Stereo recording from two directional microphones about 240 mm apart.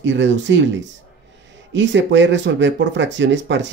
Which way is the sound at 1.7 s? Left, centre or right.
Right.